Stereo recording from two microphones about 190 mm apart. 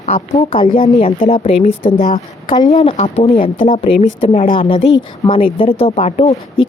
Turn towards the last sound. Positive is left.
turn(degrees=30)  # may be behind; listen again after turning